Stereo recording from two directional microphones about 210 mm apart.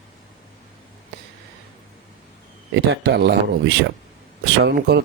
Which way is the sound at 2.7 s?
55° right (ahead or behind).